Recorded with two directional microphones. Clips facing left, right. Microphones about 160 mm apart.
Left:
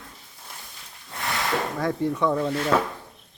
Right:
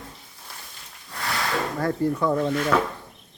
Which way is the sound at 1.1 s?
20° left (ahead or behind).